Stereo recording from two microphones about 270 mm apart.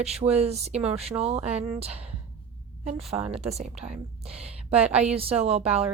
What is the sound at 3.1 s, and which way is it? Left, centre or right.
Speech, right.